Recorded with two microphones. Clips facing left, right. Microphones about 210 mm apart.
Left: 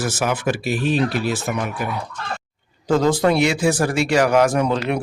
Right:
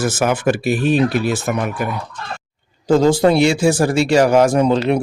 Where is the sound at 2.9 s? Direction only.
30° right (ahead or behind).